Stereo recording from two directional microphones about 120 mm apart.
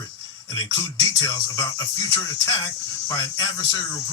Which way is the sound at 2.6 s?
30° left (ahead or behind).